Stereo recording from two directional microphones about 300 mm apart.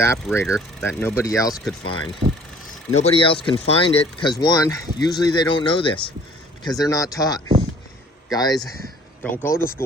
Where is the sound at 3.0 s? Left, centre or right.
Centre.